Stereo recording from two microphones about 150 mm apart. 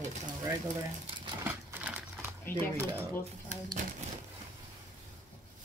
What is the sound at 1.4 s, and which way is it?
Crumpling, 10° right (ahead or behind).